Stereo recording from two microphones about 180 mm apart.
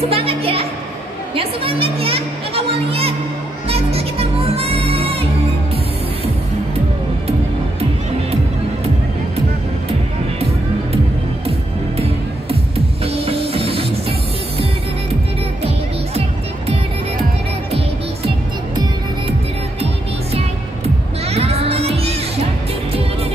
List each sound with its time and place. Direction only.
0.0 s a woman's voice: 30° right (ahead or behind)
3.6 s music: 35° right (ahead or behind)
12.4 s music: 35° right (ahead or behind)
21.3 s music: 35° right (ahead or behind)